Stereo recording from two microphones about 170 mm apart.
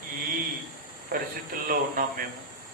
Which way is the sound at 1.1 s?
60° right (ahead or behind).